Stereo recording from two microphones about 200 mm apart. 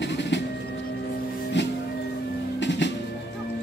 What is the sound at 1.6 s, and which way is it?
Music, 65° left (ahead or behind).